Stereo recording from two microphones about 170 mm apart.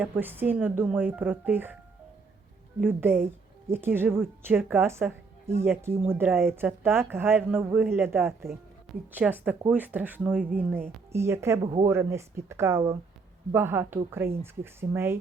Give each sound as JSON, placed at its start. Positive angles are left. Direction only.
{"t": 0.0, "sound": "a woman's voice", "side_deg": -10}
{"t": 2.8, "sound": "a woman's voice", "side_deg": -10}